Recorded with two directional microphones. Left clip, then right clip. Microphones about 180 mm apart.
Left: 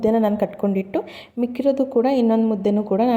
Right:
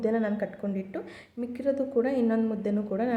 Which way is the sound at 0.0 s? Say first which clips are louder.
Left 9 dB; 35° left (ahead or behind).